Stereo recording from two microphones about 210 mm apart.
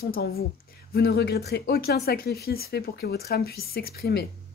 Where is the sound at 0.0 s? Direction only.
45° left (ahead or behind).